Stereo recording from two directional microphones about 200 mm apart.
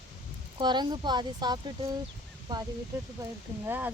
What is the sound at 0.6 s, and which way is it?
Speech, 20° right (ahead or behind).